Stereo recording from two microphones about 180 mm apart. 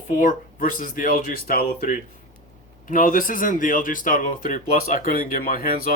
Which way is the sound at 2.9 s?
50° left (ahead or behind).